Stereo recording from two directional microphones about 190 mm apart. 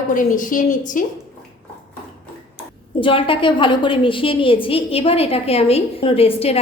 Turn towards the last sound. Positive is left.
turn(degrees=30)  # may be behind; listen again after turning